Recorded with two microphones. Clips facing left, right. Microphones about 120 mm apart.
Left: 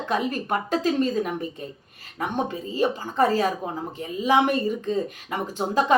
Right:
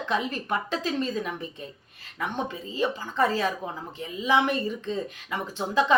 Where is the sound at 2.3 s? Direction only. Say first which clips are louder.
Left 6 dB; 45° left (ahead or behind).